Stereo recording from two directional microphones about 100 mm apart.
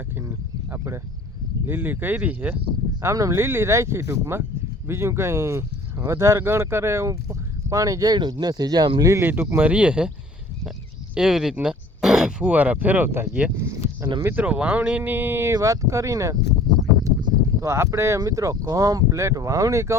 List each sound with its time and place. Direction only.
0.2 s a sound: 25° right (ahead or behind)
1.6 s speech: 20° right (ahead or behind)
3.0 s speech: 30° right (ahead or behind)
9.2 s speech: 25° right (ahead or behind)
11.1 s speech: 5° right (ahead or behind); by 14.4 s 25° right (ahead or behind)
14.4 s speech: 15° right (ahead or behind); by 16.4 s 35° right (ahead or behind)
17.6 s speech: 30° right (ahead or behind)